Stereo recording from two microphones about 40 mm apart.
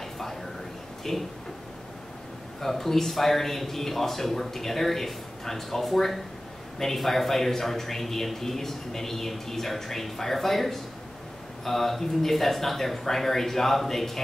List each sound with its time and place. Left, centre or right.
1.1 s speech: centre
2.6 s a man's voice: centre